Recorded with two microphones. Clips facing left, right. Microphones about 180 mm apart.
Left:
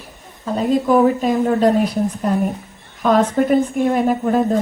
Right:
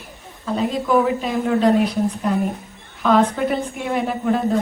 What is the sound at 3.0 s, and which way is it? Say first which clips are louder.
A woman's voice: left 2 dB; 45° left (ahead or behind).